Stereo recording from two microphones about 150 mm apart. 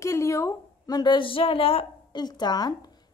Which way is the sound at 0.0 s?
20° left (ahead or behind).